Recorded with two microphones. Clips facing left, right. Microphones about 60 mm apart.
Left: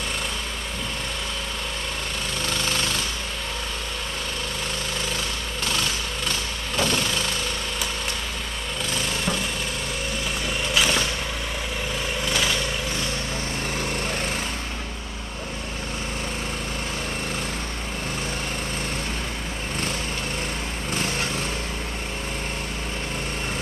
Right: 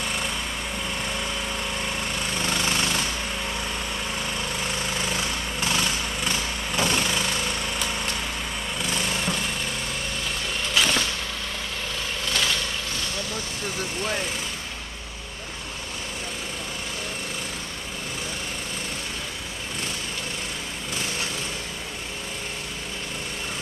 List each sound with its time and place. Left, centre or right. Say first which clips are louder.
2.3 s jackhammer: right 1 dB; centre
4.6 s jackhammer: right 1 dB; centre
8.8 s jackhammer: left 1 dB; centre
10.2 s vehicle: left 2 dB; centre
12.3 s vehicle: left 1 dB; centre